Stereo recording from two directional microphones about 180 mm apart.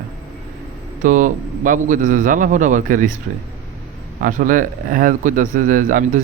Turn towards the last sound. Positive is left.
turn(degrees=-45)  # may be behind; listen again after turning